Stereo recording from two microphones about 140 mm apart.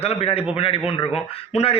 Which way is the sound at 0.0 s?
45° left (ahead or behind).